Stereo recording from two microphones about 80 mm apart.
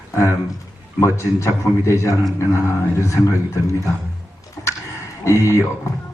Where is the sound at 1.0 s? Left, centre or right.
Left.